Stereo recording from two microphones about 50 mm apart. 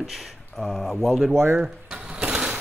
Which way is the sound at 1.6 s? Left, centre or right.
Centre.